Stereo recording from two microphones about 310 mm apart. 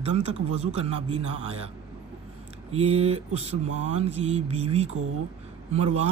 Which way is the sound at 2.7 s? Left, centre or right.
Centre.